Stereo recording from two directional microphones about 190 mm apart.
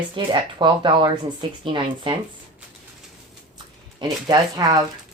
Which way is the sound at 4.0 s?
20° right (ahead or behind).